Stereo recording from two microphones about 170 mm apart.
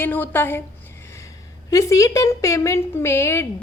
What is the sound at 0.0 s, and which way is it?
Speech, 10° left (ahead or behind).